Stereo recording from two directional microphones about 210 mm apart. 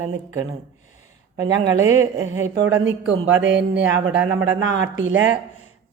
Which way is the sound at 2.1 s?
70° right (ahead or behind).